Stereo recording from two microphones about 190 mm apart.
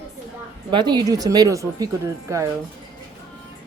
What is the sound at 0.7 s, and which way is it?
A woman's voice, 25° right (ahead or behind).